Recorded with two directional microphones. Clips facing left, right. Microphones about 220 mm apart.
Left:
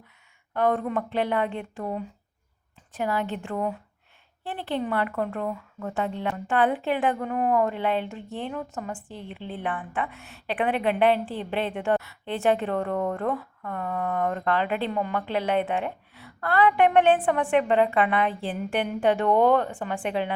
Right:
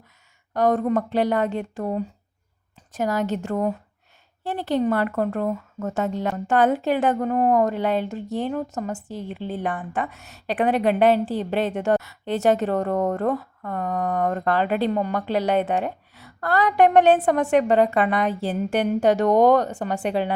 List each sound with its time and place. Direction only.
0.5 s a woman's voice: 40° right (ahead or behind)